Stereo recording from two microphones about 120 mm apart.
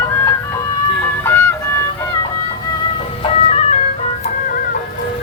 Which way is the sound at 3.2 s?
60° left (ahead or behind).